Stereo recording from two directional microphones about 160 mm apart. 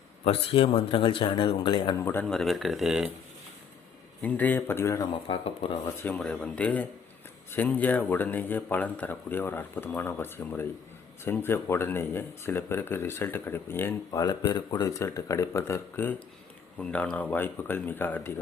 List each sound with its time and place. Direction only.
0.3 s speech: 35° left (ahead or behind)
2.0 s speech: 15° left (ahead or behind)
2.2 s speech: centre (ahead or behind)
4.2 s speech: 10° left (ahead or behind)
5.3 s speech: 35° left (ahead or behind)
6.0 s speech: 10° left (ahead or behind)